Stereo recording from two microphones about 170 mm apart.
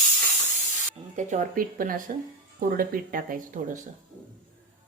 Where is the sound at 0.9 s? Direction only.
45° right (ahead or behind).